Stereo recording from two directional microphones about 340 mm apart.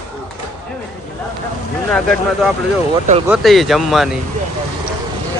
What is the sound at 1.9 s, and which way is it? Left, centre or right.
Speech, centre.